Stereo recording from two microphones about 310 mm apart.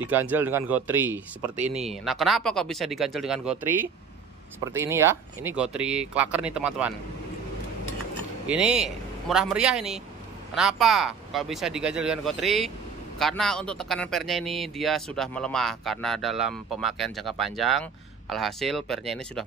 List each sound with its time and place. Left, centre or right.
0.0 s a man's voice: centre
8.5 s a man's voice: centre